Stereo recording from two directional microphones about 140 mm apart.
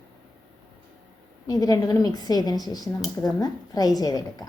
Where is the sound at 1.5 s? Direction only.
25° left (ahead or behind).